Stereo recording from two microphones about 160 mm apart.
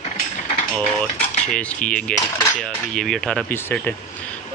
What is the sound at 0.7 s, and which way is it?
Cutlery, 5° left (ahead or behind).